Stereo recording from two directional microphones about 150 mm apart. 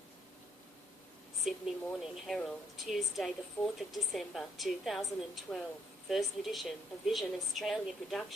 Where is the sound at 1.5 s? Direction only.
Centre (ahead or behind).